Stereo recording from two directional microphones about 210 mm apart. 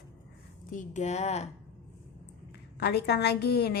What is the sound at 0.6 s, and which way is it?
Speech, 35° left (ahead or behind).